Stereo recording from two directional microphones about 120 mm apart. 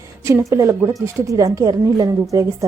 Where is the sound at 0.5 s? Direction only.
25° right (ahead or behind).